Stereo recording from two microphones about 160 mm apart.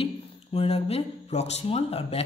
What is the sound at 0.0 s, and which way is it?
Speech, 35° left (ahead or behind).